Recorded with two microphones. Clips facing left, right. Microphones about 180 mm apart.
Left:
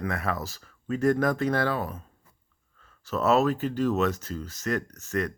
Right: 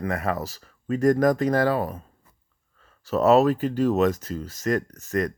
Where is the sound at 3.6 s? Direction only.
40° right (ahead or behind).